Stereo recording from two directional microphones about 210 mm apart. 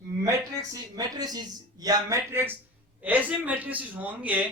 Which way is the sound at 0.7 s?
20° right (ahead or behind).